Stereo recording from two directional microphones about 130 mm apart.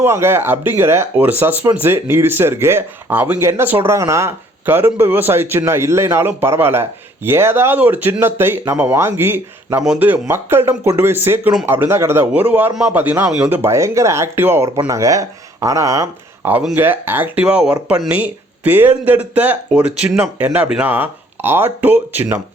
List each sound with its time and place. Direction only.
0.0 s speech: 20° right (ahead or behind)